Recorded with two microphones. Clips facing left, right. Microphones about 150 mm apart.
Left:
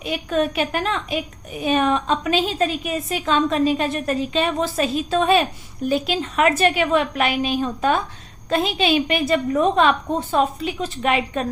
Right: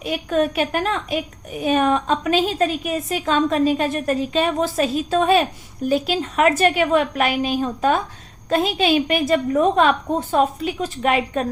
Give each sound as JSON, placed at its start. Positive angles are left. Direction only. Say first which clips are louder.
{"t": 0.0, "sound": "a woman's voice", "louder": "right 1 dB", "side_deg": -45}